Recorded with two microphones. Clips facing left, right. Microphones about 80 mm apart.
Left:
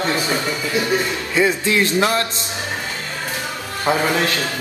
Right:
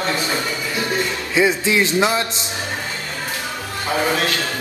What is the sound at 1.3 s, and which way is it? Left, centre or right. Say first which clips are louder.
Speech: right 1 dB; centre.